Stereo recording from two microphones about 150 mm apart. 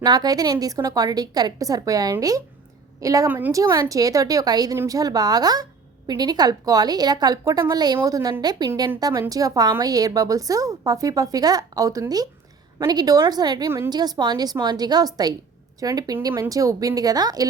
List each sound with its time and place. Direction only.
0.0 s a woman's voice: 25° right (ahead or behind)